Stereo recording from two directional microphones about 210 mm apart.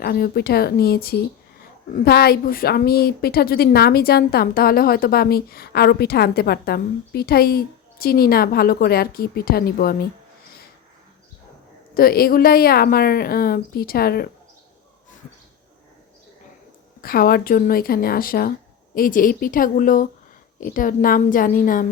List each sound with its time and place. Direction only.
0.0 s a woman's voice: 45° left (ahead or behind)
11.9 s a woman's voice: 45° left (ahead or behind)
17.0 s a woman's voice: 45° left (ahead or behind)